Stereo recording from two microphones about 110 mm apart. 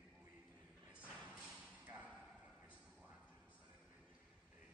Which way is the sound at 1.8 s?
15° right (ahead or behind).